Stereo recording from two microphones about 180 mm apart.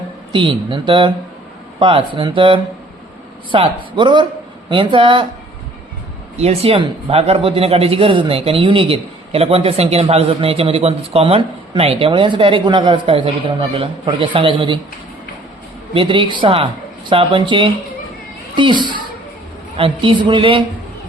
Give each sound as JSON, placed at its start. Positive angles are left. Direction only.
{"t": 0.3, "sound": "a woman's voice", "side_deg": -30}
{"t": 6.3, "sound": "a man's voice", "side_deg": -35}
{"t": 16.0, "sound": "a woman's voice", "side_deg": -30}